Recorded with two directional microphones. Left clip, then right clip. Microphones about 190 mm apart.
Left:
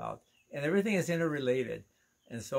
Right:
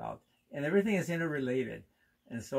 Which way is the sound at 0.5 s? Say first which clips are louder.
Even; 15° left (ahead or behind).